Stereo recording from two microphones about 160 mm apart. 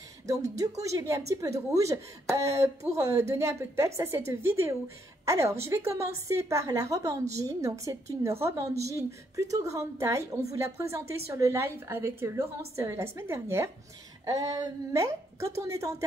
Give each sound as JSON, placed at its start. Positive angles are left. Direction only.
{"t": 0.3, "sound": "a woman's voice", "side_deg": -20}